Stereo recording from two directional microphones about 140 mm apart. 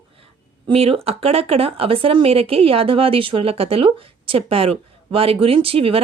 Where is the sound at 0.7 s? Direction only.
45° right (ahead or behind).